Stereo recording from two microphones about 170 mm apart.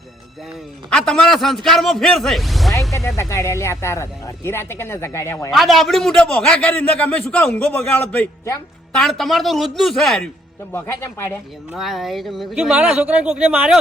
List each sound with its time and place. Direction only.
0.9 s a man's voice: 5° left (ahead or behind)
3.2 s speech: 15° left (ahead or behind)
5.5 s a man's voice: centre (ahead or behind)
10.7 s speech: 15° left (ahead or behind)
11.7 s a man's voice: centre (ahead or behind)